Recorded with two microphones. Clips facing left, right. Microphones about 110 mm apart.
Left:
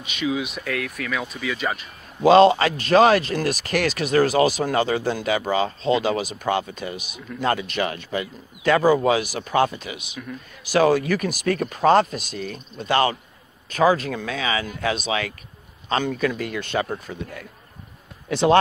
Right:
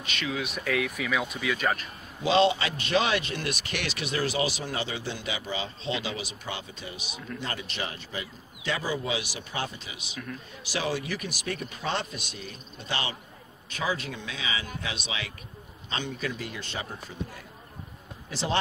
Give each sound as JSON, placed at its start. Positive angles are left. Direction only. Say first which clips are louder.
{"t": 0.0, "sound": "speech", "louder": "left 7 dB", "side_deg": 15}
{"t": 0.6, "sound": "speech", "louder": "left 1 dB", "side_deg": 0}
{"t": 2.2, "sound": "speech", "louder": "left 9 dB", "side_deg": 50}
{"t": 10.6, "sound": "speech", "louder": "left 13 dB", "side_deg": 50}